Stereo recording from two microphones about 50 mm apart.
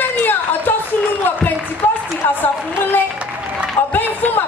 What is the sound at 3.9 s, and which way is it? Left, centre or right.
Speech, left.